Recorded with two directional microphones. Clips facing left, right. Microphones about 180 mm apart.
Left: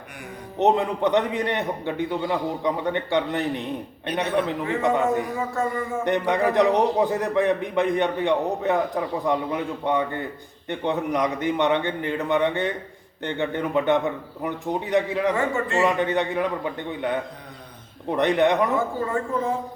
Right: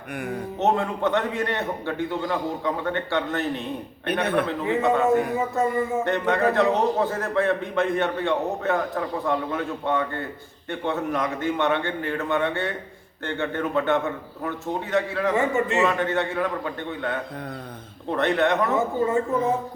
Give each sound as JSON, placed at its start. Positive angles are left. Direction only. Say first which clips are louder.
{"t": 0.6, "sound": "a man's voice", "louder": "left 3 dB", "side_deg": 20}
{"t": 4.9, "sound": "a man's voice", "louder": "right 2 dB", "side_deg": 15}
{"t": 5.4, "sound": "a woman's voice", "louder": "right 3 dB", "side_deg": -20}
{"t": 6.1, "sound": "a man's voice", "louder": "left 4 dB", "side_deg": 15}
{"t": 15.4, "sound": "a woman's voice", "louder": "right 1 dB", "side_deg": -20}
{"t": 15.8, "sound": "a man's voice", "louder": "left 1 dB", "side_deg": 15}
{"t": 18.7, "sound": "a woman's voice", "louder": "right 2 dB", "side_deg": -20}